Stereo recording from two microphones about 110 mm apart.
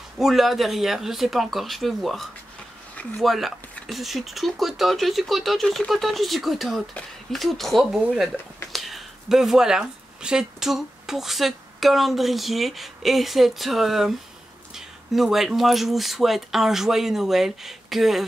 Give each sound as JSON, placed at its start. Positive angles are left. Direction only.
{"t": 0.2, "sound": "speech", "side_deg": 0}